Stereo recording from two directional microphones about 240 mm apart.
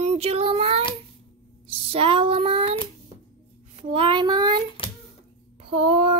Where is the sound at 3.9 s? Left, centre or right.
Right.